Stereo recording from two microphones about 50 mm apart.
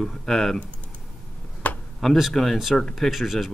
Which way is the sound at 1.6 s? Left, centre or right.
Left.